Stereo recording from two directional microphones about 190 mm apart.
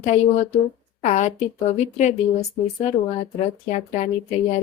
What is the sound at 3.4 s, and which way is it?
Speech, 40° left (ahead or behind).